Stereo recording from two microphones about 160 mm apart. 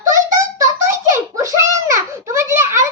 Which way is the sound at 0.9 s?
15° right (ahead or behind).